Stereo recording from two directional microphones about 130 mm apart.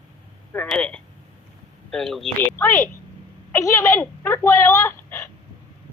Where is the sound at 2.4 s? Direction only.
15° left (ahead or behind).